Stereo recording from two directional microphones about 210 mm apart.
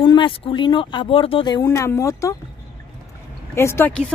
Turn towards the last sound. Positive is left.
turn(degrees=10)  # may be behind; listen again after turning